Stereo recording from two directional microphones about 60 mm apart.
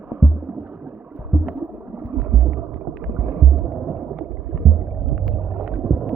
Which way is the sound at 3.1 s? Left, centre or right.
Right.